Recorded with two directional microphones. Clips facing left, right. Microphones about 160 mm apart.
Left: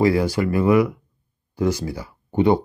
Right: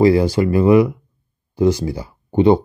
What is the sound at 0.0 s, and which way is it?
Speech, 25° right (ahead or behind).